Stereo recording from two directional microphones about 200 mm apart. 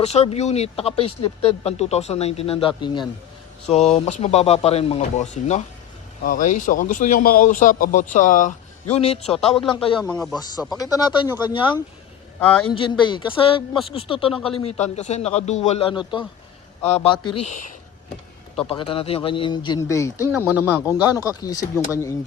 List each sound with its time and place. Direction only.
0.0 s speech: 30° left (ahead or behind)
3.7 s speech: 35° left (ahead or behind)
12.7 s speech: 25° left (ahead or behind)
18.7 s speech: 30° left (ahead or behind)
20.2 s speech: 10° right (ahead or behind)
20.8 s speech: 15° left (ahead or behind)